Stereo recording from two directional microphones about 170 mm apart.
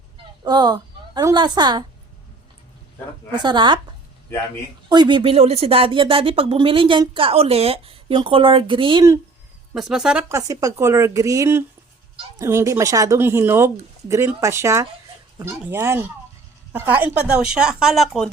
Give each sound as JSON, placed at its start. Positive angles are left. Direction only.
{"t": 0.4, "sound": "a woman's voice", "side_deg": -25}
{"t": 3.3, "sound": "speech", "side_deg": -25}
{"t": 4.9, "sound": "speech", "side_deg": -25}
{"t": 9.7, "sound": "speech", "side_deg": 0}
{"t": 10.2, "sound": "speech", "side_deg": -20}